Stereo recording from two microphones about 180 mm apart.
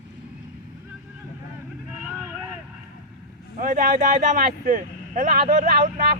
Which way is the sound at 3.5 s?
50° right (ahead or behind).